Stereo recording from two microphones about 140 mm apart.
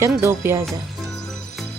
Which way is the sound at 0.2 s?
20° right (ahead or behind).